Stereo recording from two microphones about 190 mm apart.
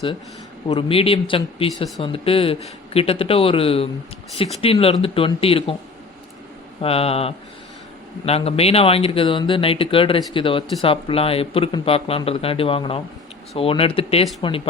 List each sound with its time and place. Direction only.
0.7 s speech: 30° left (ahead or behind)
6.8 s speech: 30° left (ahead or behind)